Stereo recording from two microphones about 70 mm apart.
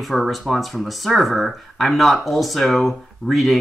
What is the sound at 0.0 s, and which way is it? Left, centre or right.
Speech, centre.